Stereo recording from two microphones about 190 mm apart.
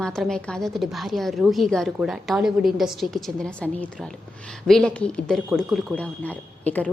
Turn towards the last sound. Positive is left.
turn(degrees=10)  # may be behind; listen again after turning